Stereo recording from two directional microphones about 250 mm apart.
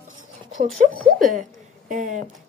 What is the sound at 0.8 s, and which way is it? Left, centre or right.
Speech, right.